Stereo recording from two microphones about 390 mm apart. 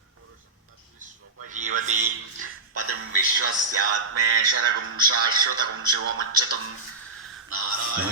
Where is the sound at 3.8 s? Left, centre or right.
Right.